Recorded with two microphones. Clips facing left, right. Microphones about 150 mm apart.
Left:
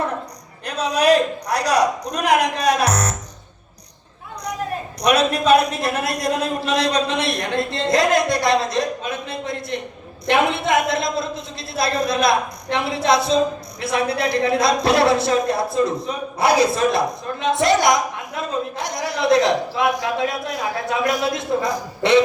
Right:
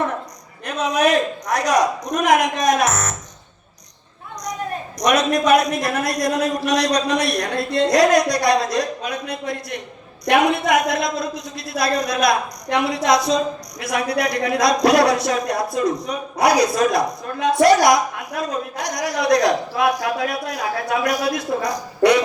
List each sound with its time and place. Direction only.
0.6 s a man's voice: 35° left (ahead or behind)
4.9 s a woman's voice: 30° left (ahead or behind)